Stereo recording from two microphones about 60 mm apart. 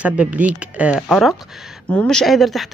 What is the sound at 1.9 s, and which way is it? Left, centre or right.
Speech, centre.